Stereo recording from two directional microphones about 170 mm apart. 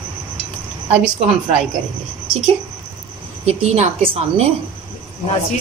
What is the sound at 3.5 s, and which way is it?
A woman's voice, 40° right (ahead or behind).